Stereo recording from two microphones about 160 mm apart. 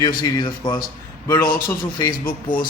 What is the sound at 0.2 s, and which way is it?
Speech, 25° left (ahead or behind).